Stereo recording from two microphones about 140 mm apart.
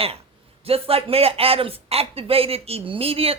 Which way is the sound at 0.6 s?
45° right (ahead or behind).